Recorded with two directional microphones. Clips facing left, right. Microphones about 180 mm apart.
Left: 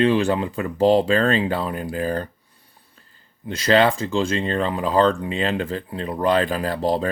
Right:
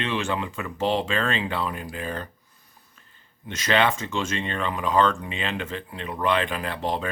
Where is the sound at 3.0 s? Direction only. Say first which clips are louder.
Left 3 dB; 35° left (ahead or behind).